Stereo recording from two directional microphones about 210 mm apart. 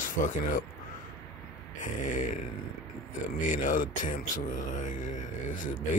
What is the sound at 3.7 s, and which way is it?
Speech, 40° left (ahead or behind).